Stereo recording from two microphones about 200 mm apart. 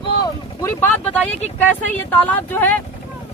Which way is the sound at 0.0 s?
20° left (ahead or behind).